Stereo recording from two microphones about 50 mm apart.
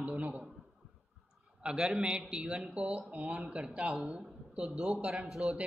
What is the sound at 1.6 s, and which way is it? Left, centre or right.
A man's voice, centre.